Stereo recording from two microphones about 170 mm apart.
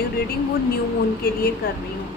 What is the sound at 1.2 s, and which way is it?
Speech, 65° left (ahead or behind).